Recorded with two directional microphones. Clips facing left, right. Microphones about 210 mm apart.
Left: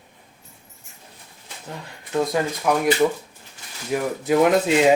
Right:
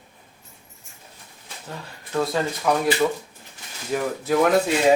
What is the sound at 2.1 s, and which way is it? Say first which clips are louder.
Speech: left 2 dB; 15° left (ahead or behind).